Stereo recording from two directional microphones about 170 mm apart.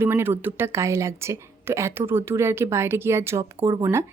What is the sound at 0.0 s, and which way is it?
A woman's voice, 15° right (ahead or behind).